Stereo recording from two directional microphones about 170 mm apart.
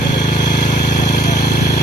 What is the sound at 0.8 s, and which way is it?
Vehicle, 75° left (ahead or behind).